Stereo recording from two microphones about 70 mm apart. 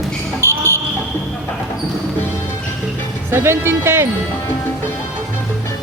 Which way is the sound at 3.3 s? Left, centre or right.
Right.